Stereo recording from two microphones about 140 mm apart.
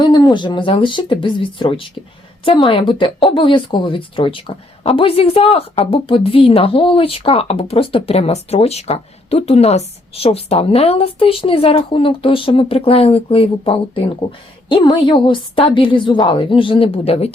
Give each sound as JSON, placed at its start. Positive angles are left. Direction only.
{"t": 0.0, "sound": "a woman's voice", "side_deg": 30}